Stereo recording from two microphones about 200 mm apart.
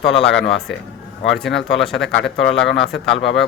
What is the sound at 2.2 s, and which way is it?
Speech, 65° left (ahead or behind).